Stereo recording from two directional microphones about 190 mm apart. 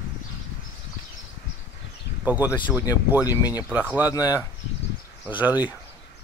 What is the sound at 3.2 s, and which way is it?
Speech, 20° left (ahead or behind).